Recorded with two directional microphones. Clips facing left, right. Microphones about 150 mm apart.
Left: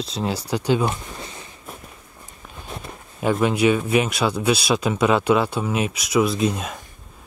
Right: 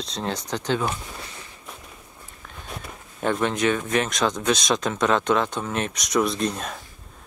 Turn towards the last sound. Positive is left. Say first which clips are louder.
# left 4 dB
turn(degrees=5)  # may be behind; listen again after turning